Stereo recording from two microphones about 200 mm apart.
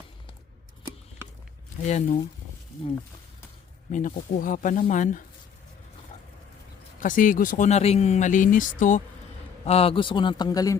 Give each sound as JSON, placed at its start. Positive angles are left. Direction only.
{"t": 1.8, "sound": "speech", "side_deg": 35}
{"t": 3.9, "sound": "speech", "side_deg": 40}
{"t": 7.0, "sound": "speech", "side_deg": 40}
{"t": 9.6, "sound": "speech", "side_deg": 30}